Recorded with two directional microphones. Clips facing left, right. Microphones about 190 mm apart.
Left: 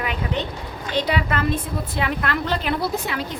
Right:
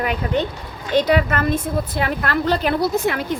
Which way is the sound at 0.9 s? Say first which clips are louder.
Right 6 dB; 45° right (ahead or behind).